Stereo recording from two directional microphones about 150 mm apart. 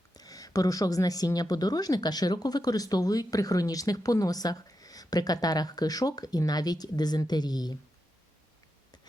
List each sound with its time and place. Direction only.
0.1 s a woman's voice: 25° left (ahead or behind)